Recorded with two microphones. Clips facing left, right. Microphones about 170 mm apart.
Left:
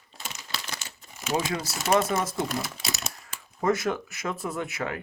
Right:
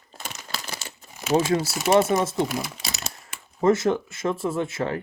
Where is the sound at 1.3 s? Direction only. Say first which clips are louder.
Right 7 dB; 30° right (ahead or behind).